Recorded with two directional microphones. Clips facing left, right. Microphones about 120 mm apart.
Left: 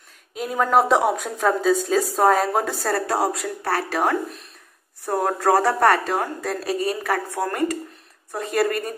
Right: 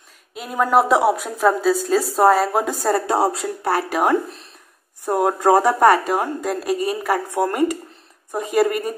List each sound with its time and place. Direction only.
0.3 s a woman's voice: centre (ahead or behind)
2.6 s speech: 10° right (ahead or behind)
3.2 s speech: 25° right (ahead or behind)
3.7 s speech: 15° right (ahead or behind)
7.2 s speech: 20° right (ahead or behind)